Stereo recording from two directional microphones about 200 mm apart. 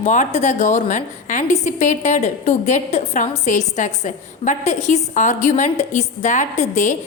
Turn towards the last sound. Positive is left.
turn(degrees=35)  # may be behind; listen again after turning